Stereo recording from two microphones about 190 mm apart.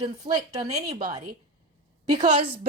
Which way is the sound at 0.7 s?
35° right (ahead or behind).